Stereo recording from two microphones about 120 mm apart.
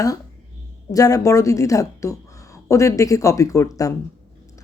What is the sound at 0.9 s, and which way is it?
Speech, 30° left (ahead or behind).